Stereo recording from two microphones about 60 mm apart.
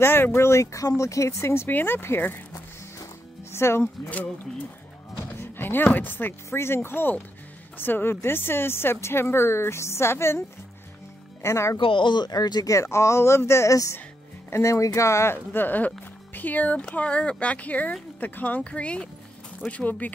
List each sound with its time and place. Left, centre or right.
0.0 s speech: left
1.7 s speech: left
3.5 s speech: left
4.1 s speech: left
5.4 s a sound: left
5.9 s speech: left
11.4 s speech: left
12.3 s speech: left
15.3 s speech: left